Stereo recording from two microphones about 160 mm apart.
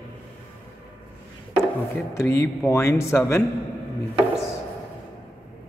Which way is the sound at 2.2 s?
15° left (ahead or behind).